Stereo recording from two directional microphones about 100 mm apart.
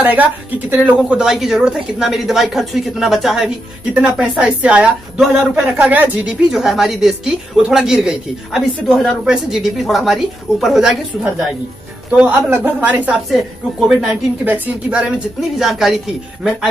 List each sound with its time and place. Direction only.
0.0 s a woman's voice: 15° right (ahead or behind)
1.2 s a woman's voice: centre (ahead or behind)
6.5 s speech: 5° right (ahead or behind)
12.1 s a woman's voice: 10° right (ahead or behind)
13.3 s a woman's voice: 5° right (ahead or behind)
15.5 s speech: centre (ahead or behind)